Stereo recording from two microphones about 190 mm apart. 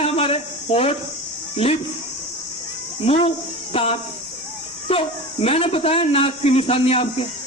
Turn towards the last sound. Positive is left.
turn(degrees=30)  # may be behind; listen again after turning